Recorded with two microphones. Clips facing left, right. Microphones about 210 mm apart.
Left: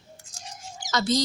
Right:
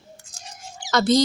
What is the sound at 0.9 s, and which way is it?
Speech, 65° right (ahead or behind).